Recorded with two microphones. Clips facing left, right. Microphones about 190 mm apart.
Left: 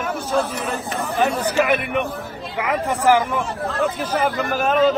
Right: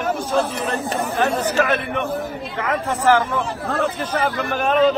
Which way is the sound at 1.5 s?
15° left (ahead or behind).